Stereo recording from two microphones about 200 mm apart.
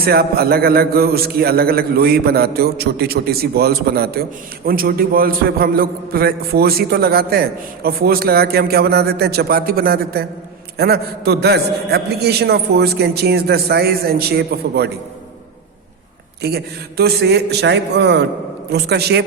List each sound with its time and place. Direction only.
0.0 s a man's voice: 50° right (ahead or behind)
16.4 s a man's voice: 50° right (ahead or behind)